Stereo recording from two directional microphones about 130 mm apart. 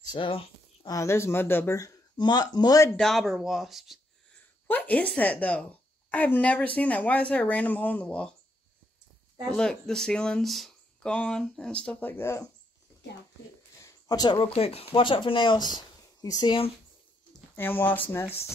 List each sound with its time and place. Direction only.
0.0 s speech: 35° left (ahead or behind)
0.8 s speech: 25° left (ahead or behind)
2.9 s speech: 5° left (ahead or behind)
4.6 s a woman's voice: 15° left (ahead or behind)
9.6 s a woman's voice: 5° left (ahead or behind)
13.7 s a sound: 25° left (ahead or behind)
14.5 s speech: 50° left (ahead or behind)
15.7 s a sound: 30° left (ahead or behind)
17.6 s a woman's voice: 15° left (ahead or behind)